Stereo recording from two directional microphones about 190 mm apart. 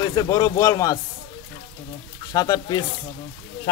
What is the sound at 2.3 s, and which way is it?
Speech, 20° left (ahead or behind).